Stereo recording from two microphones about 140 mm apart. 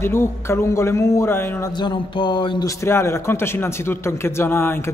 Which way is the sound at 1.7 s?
30° left (ahead or behind).